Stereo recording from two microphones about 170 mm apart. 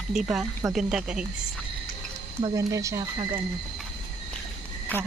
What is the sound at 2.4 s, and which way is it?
Speech, 20° right (ahead or behind).